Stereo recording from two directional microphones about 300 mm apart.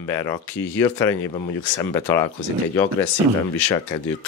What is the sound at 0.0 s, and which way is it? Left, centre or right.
Speech, centre.